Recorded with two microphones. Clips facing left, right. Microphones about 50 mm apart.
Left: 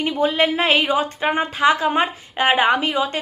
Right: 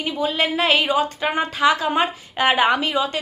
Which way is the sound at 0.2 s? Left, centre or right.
Left.